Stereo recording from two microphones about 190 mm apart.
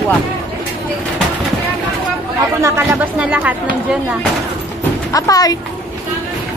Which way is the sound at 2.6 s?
15° right (ahead or behind).